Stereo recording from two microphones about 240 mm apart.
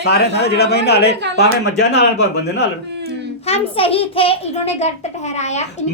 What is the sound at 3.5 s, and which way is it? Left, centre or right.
A child's voice, left.